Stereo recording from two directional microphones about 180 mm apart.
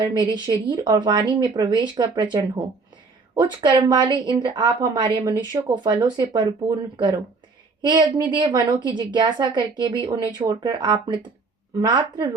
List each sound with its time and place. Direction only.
0.0 s speech: 25° right (ahead or behind)